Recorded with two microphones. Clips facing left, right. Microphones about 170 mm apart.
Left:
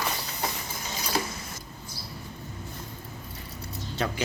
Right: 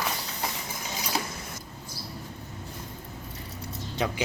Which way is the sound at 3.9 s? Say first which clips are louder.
Right 1 dB; 15° right (ahead or behind).